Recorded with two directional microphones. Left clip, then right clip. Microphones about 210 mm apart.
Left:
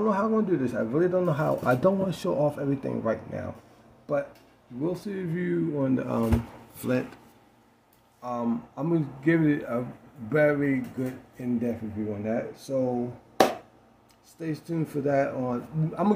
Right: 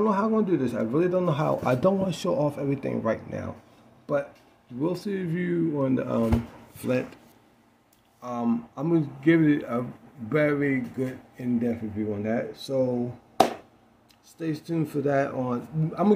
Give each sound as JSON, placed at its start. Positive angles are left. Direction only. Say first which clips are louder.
{"t": 0.0, "sound": "a man's voice", "louder": "right 1 dB", "side_deg": -15}
{"t": 5.9, "sound": "speech", "louder": "right 1 dB", "side_deg": 0}
{"t": 8.2, "sound": "a man's voice", "louder": "right 1 dB", "side_deg": -10}
{"t": 14.4, "sound": "a man's voice", "louder": "right 2 dB", "side_deg": -15}